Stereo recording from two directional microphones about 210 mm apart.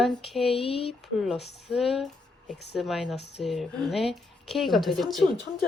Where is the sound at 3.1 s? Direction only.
55° left (ahead or behind).